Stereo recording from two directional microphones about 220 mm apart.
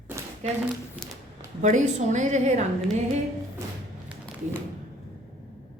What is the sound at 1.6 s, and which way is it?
A woman's voice, 35° right (ahead or behind).